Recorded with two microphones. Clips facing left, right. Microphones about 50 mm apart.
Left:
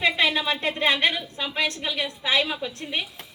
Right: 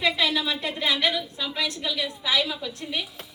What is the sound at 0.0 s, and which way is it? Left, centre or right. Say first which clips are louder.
A woman's voice: left 2 dB; left.